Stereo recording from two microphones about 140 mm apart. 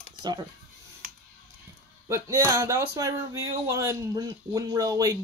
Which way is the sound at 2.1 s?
20° right (ahead or behind).